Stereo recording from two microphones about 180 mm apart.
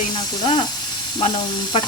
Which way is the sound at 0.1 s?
25° left (ahead or behind).